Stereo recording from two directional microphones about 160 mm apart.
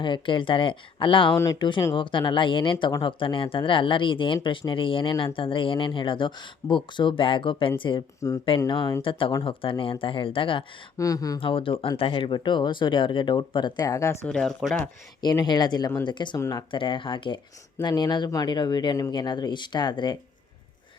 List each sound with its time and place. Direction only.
0.0 s speech: 30° left (ahead or behind)
10.9 s speech: 20° left (ahead or behind)
11.3 s speech: 35° left (ahead or behind); by 14.2 s 20° left (ahead or behind)
14.3 s speech: 5° left (ahead or behind)
15.2 s speech: 25° left (ahead or behind)